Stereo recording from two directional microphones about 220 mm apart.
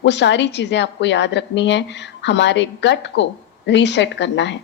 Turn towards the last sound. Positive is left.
turn(degrees=55)  # may be behind; listen again after turning